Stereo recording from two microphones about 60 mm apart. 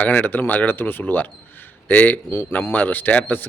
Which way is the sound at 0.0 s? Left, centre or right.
Left.